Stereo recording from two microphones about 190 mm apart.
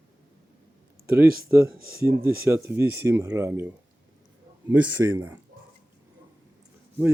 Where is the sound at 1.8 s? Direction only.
50° right (ahead or behind).